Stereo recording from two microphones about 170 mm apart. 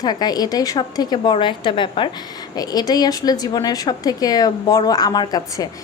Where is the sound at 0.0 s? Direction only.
25° left (ahead or behind).